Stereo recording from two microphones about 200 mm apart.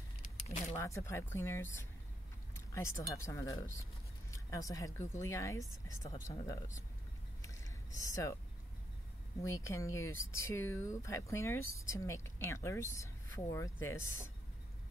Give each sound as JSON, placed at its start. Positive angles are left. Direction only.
{"t": 0.2, "sound": "a sound", "side_deg": 35}
{"t": 0.7, "sound": "speech", "side_deg": 15}
{"t": 8.1, "sound": "speech", "side_deg": 15}
{"t": 9.4, "sound": "speech", "side_deg": 15}